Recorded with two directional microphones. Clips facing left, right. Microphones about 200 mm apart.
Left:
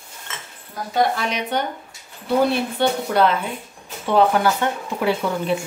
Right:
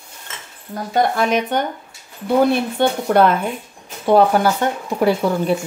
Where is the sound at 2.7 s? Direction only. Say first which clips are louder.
Right 4 dB; 50° right (ahead or behind).